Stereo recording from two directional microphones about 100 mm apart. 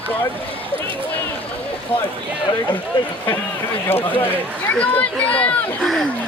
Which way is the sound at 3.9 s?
20° left (ahead or behind).